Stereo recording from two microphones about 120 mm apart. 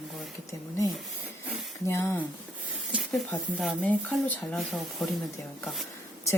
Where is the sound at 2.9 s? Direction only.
Centre (ahead or behind).